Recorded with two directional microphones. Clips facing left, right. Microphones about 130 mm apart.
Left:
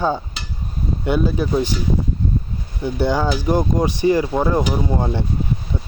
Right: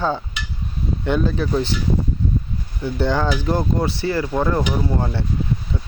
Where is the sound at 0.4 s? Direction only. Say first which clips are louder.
Right 2 dB; 35° left (ahead or behind).